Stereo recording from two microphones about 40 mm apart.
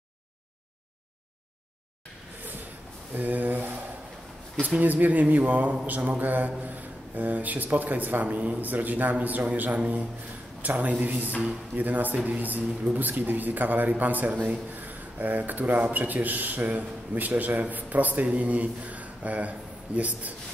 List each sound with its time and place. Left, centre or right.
3.2 s a man's voice: right